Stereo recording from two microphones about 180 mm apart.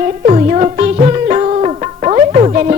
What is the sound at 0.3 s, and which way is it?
Music, 35° right (ahead or behind).